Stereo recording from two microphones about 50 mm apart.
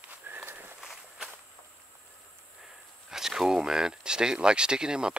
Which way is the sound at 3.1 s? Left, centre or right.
Centre.